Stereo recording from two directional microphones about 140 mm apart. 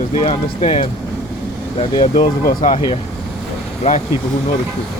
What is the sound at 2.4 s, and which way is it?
Speech, 75° left (ahead or behind).